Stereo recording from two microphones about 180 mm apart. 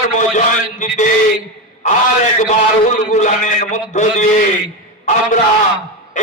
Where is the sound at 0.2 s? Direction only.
45° left (ahead or behind).